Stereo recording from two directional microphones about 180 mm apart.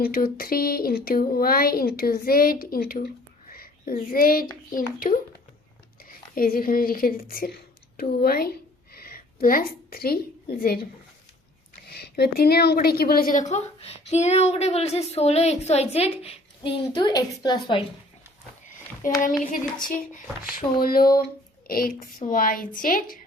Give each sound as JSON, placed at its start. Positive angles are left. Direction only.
{"t": 0.0, "sound": "speech", "side_deg": 55}
{"t": 3.5, "sound": "a sound", "side_deg": 55}
{"t": 4.7, "sound": "a woman's voice", "side_deg": 50}
{"t": 8.1, "sound": "a sound", "side_deg": 60}
{"t": 11.9, "sound": "a woman's voice", "side_deg": 65}
{"t": 19.2, "sound": "a woman's voice", "side_deg": 45}